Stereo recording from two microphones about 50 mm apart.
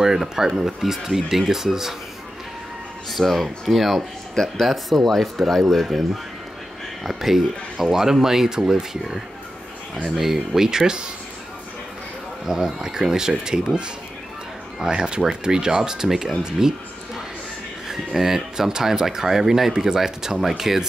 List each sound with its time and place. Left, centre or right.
0.0 s speech: centre
3.1 s speech: centre
10.0 s speech: centre
12.4 s speech: centre
17.8 s speech: centre